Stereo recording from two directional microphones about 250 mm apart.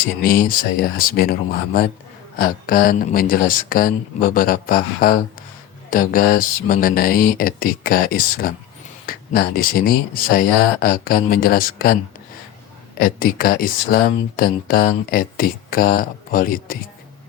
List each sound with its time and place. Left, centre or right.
0.2 s speech: left
13.0 s speech: left